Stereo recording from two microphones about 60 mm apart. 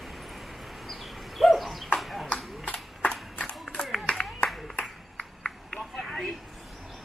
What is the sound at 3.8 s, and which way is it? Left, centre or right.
Clapping, centre.